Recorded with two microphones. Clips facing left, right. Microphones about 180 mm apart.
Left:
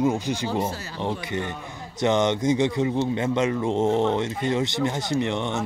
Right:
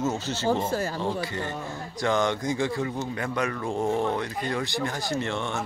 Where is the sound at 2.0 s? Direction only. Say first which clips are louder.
Left 4 dB; 20° left (ahead or behind).